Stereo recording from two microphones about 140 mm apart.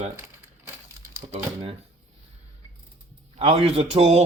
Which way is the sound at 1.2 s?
35° right (ahead or behind).